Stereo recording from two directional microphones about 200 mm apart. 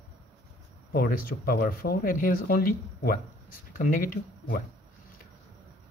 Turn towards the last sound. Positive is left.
turn(degrees=45)  # may be behind; listen again after turning